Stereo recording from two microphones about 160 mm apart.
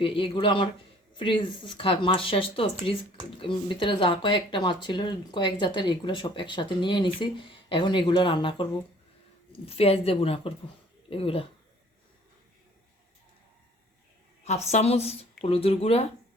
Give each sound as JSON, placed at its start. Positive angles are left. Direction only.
{"t": 0.0, "sound": "speech", "side_deg": 30}
{"t": 14.7, "sound": "speech", "side_deg": 45}